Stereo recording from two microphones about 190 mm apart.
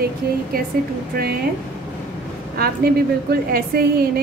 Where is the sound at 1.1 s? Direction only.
55° right (ahead or behind).